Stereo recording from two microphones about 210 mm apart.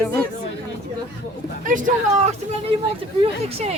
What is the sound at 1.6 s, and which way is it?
Speech, 40° right (ahead or behind).